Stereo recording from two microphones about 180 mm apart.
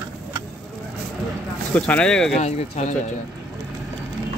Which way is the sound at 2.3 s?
40° left (ahead or behind).